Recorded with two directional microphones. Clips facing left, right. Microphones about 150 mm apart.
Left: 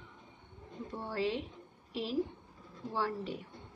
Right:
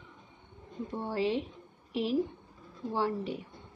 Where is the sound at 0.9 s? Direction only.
20° right (ahead or behind).